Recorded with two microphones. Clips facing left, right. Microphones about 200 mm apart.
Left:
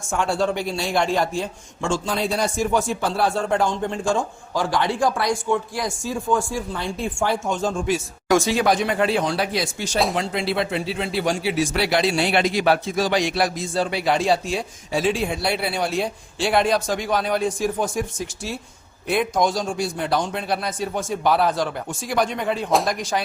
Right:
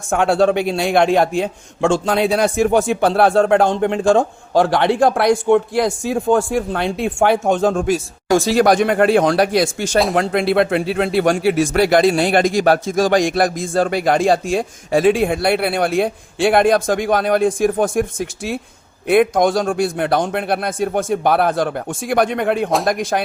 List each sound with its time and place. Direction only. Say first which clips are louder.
0.1 s a man's voice: right 7 dB; 60° right (ahead or behind)
8.3 s speech: right 3 dB; 35° right (ahead or behind)
8.5 s speech: right 6 dB; 80° right
8.8 s a man's voice: right 7 dB; 55° right (ahead or behind)
9.2 s speech: right 8 dB; 90° right
9.7 s a man's voice: right 6 dB; 50° right (ahead or behind)